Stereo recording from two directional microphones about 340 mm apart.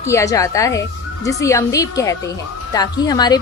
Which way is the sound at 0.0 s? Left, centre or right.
Centre.